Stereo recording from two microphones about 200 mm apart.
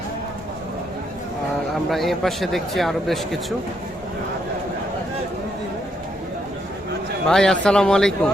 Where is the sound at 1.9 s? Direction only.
Centre (ahead or behind).